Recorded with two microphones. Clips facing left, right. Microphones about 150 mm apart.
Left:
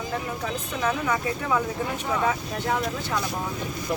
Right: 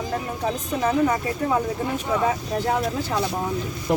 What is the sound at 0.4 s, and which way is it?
Speech, 35° right (ahead or behind).